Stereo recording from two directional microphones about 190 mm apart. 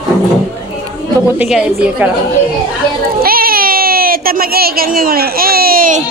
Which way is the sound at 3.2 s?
50° right (ahead or behind).